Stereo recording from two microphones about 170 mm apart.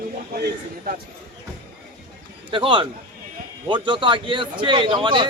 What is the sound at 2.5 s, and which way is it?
Speech, 30° right (ahead or behind).